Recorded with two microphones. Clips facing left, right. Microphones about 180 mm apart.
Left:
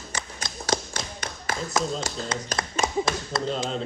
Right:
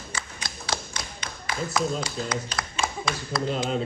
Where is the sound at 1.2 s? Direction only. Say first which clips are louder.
Right 1 dB; 45° left (ahead or behind).